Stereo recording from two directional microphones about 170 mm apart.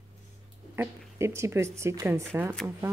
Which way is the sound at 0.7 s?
15° right (ahead or behind).